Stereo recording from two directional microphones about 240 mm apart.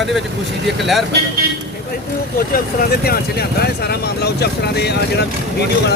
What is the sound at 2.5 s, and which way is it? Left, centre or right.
Speech, left.